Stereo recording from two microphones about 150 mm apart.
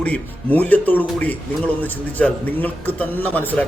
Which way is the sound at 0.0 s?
10° left (ahead or behind).